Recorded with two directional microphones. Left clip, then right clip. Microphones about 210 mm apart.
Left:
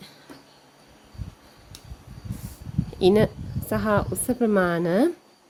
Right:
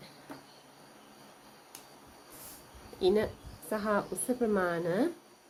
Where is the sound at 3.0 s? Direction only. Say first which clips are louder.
Left 9 dB; 50° left (ahead or behind).